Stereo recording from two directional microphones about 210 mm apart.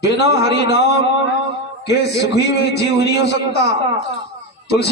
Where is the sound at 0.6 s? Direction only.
55° left (ahead or behind).